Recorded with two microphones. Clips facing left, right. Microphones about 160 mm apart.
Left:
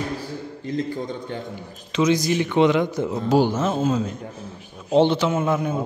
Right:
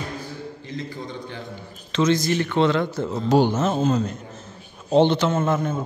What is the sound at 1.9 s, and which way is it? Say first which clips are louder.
Speech: left 1 dB; 10° left (ahead or behind).